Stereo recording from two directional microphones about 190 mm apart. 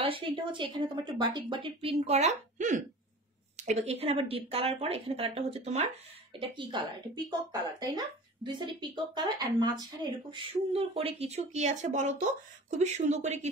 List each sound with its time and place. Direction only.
0.0 s speech: 25° right (ahead or behind)
6.4 s speech: 25° right (ahead or behind)